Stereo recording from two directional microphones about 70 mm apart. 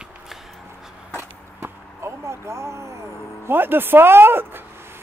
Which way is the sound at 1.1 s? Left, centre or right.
Right.